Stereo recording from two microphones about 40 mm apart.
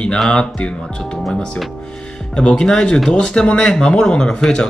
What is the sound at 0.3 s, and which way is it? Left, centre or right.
Speech, left.